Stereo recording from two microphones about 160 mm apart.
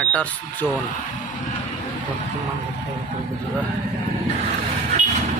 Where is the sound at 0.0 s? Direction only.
10° left (ahead or behind).